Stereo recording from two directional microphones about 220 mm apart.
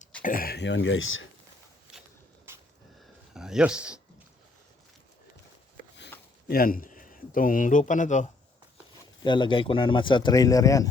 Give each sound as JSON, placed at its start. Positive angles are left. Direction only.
{"t": 0.2, "sound": "speech", "side_deg": 40}
{"t": 3.3, "sound": "speech", "side_deg": 0}
{"t": 6.5, "sound": "speech", "side_deg": 40}
{"t": 9.2, "sound": "speech", "side_deg": 20}